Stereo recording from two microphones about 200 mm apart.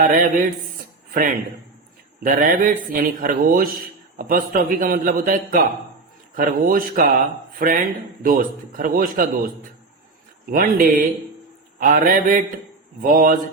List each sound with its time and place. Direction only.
0.0 s a man's voice: 45° right (ahead or behind)
2.2 s a man's voice: 45° right (ahead or behind)